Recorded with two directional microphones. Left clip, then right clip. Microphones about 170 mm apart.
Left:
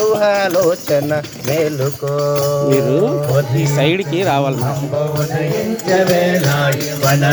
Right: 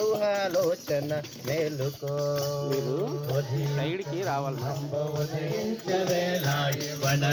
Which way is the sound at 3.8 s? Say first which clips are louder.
Left 17 dB; 90° left.